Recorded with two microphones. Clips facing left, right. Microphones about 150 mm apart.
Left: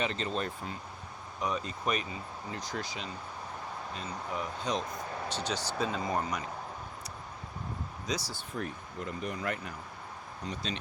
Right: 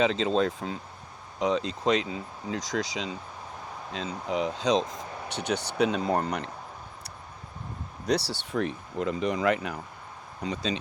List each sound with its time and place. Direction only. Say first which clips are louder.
0.0 s speech: right 9 dB; 90° right
4.8 s speech: right 6 dB; 20° right (ahead or behind)
5.3 s speech: right 7 dB; 60° right (ahead or behind)
8.0 s speech: right 10 dB; 70° right (ahead or behind); by 9.7 s 90° right